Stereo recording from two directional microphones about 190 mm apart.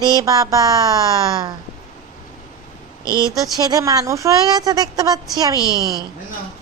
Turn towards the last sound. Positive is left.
turn(degrees=20)  # may be behind; listen again after turning